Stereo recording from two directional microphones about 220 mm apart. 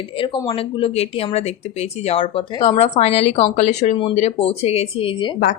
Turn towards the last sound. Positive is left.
turn(degrees=25)  # may be behind; listen again after turning